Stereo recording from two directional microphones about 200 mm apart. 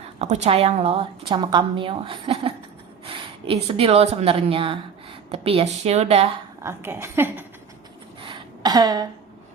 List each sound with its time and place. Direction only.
0.2 s a woman's voice: 35° right (ahead or behind)
6.6 s a woman's voice: 10° right (ahead or behind)
8.2 s a sound: 20° right (ahead or behind)